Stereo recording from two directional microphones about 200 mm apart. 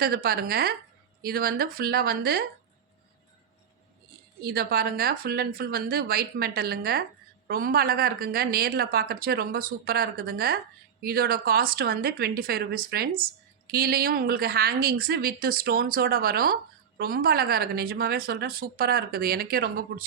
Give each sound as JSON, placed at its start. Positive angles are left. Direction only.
{"t": 0.0, "sound": "speech", "side_deg": -50}
{"t": 4.4, "sound": "speech", "side_deg": -50}